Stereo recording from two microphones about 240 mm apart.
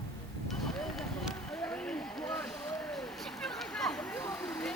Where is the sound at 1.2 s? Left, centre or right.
Centre.